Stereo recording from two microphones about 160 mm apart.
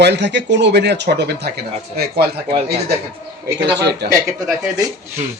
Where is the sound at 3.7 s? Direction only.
90° right.